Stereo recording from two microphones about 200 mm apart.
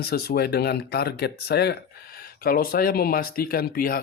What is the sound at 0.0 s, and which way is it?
Speech, 50° left (ahead or behind).